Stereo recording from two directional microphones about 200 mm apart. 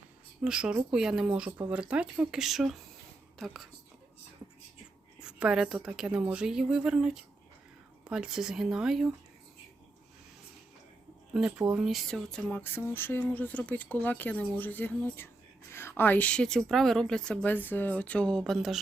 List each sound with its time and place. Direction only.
0.4 s a woman's voice: 5° right (ahead or behind)
5.2 s a woman's voice: 5° right (ahead or behind)
11.3 s a woman's voice: 5° right (ahead or behind)